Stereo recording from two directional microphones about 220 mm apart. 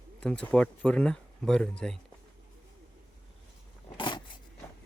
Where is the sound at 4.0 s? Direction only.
20° left (ahead or behind).